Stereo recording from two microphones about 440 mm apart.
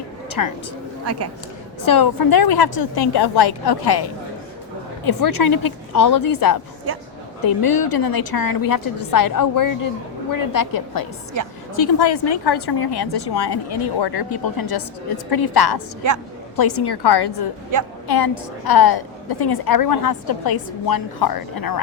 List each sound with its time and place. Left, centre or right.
0.4 s a woman's voice: left
1.8 s a woman's voice: left
5.0 s a woman's voice: left
7.6 s a woman's voice: left